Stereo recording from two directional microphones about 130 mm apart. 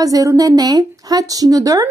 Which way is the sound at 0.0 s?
25° right (ahead or behind).